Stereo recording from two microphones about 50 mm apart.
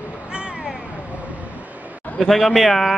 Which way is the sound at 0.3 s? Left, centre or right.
Right.